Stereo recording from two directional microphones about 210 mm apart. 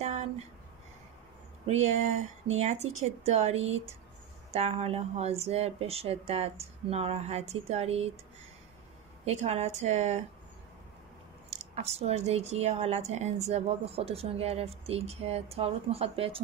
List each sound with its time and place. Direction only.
0.0 s a sound: 30° right (ahead or behind)
1.7 s speech: 30° right (ahead or behind)
9.2 s speech: 30° right (ahead or behind)
11.5 s speech: 30° right (ahead or behind)